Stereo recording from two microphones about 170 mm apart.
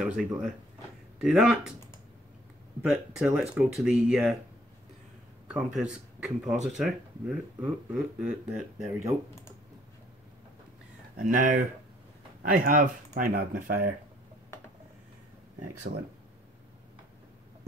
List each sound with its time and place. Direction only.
0.0 s speech: 5° right (ahead or behind)
2.8 s speech: 5° right (ahead or behind)
5.5 s speech: 5° right (ahead or behind)
11.1 s speech: 50° right (ahead or behind)
15.9 s speech: 60° right (ahead or behind)